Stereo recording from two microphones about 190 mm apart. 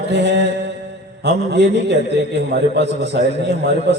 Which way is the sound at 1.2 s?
65° right (ahead or behind).